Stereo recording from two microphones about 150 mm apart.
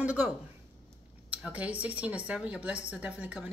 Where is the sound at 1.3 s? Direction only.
10° right (ahead or behind).